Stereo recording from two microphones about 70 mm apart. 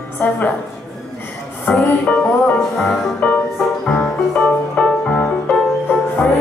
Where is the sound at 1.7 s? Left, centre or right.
Centre.